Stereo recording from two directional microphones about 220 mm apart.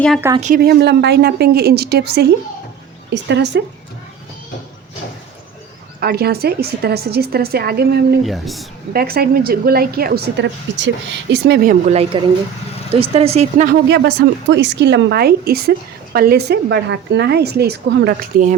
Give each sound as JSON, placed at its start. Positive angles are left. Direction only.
{"t": 0.3, "sound": "speech", "side_deg": -35}
{"t": 0.6, "sound": "a woman's voice", "side_deg": -45}
{"t": 6.0, "sound": "a woman's voice", "side_deg": -45}
{"t": 8.2, "sound": "speech", "side_deg": 0}
{"t": 8.9, "sound": "a woman's voice", "side_deg": -45}
{"t": 13.8, "sound": "a woman's voice", "side_deg": -50}